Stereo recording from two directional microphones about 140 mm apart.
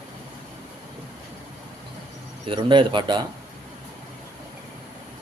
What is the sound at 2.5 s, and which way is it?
Speech, 35° right (ahead or behind).